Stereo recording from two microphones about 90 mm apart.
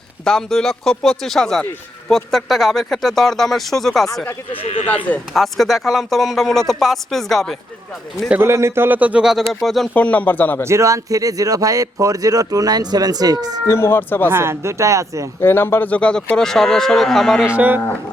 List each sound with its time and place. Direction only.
0.3 s speech: 5° left (ahead or behind)
4.5 s speech: 85° left
5.3 s speech: centre (ahead or behind)
8.3 s speech: 25° right (ahead or behind)
9.2 s speech: centre (ahead or behind)
9.9 s speech: 15° left (ahead or behind)
10.6 s a man's voice: 30° right (ahead or behind)
13.7 s speech: 30° left (ahead or behind)
14.3 s a man's voice: 30° right (ahead or behind)
15.4 s speech: 25° left (ahead or behind); by 17.4 s 5° left (ahead or behind)
17.4 s speech: 15° right (ahead or behind)